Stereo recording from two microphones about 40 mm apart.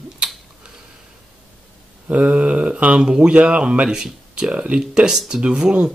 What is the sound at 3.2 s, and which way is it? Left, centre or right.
Speech, right.